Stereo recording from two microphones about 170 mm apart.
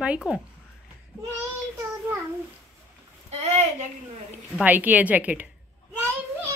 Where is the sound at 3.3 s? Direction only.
40° right (ahead or behind).